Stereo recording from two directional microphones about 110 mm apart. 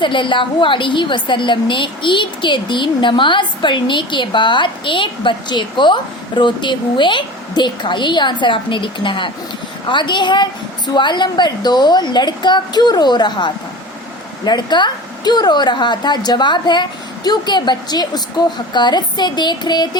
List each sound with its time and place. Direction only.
0.0 s a woman's voice: 50° left (ahead or behind)